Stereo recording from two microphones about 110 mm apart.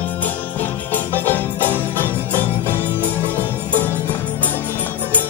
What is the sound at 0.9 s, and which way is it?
Music, 15° left (ahead or behind).